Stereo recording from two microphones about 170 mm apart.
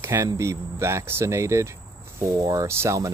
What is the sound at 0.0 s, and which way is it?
Speech, 15° right (ahead or behind).